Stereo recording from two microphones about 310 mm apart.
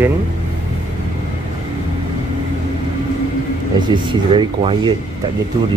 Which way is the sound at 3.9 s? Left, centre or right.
Centre.